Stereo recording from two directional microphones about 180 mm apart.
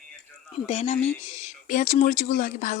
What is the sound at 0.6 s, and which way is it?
Speech, 40° left (ahead or behind).